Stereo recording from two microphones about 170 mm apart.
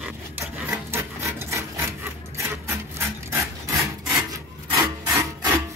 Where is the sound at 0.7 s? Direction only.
15° right (ahead or behind).